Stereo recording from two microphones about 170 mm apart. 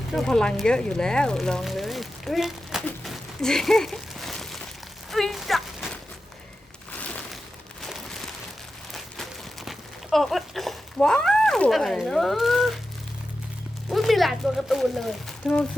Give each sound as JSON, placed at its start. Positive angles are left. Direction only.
{"t": 0.1, "sound": "speech", "side_deg": 0}
{"t": 6.9, "sound": "crumpling", "side_deg": 10}
{"t": 7.8, "sound": "a sound", "side_deg": 0}
{"t": 13.9, "sound": "speech", "side_deg": 0}